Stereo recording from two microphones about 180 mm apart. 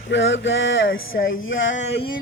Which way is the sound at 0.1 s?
85° left.